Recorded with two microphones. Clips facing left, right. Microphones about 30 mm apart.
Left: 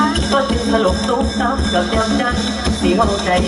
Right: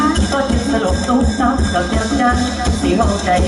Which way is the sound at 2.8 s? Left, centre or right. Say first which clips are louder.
Even; centre.